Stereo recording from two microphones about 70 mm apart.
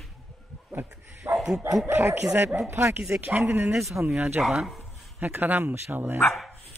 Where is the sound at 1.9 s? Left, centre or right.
Right.